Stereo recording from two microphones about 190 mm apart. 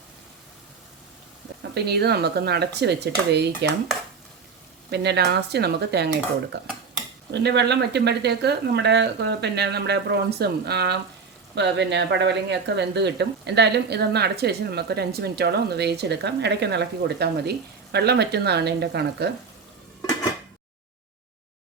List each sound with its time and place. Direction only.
1.7 s speech: 60° right (ahead or behind)
4.9 s speech: 60° right (ahead or behind)
7.3 s speech: 60° right (ahead or behind)